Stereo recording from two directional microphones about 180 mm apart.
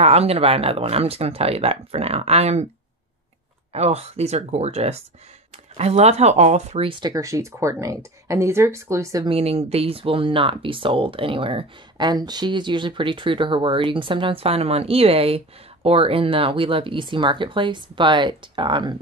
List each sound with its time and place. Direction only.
0.0 s speech: 35° right (ahead or behind)
3.7 s speech: 35° right (ahead or behind); by 9.3 s 20° right (ahead or behind)
9.3 s speech: 35° right (ahead or behind)